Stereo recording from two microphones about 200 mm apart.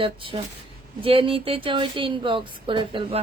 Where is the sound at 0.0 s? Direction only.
25° right (ahead or behind).